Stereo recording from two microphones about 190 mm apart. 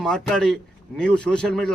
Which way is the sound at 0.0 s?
5° left (ahead or behind).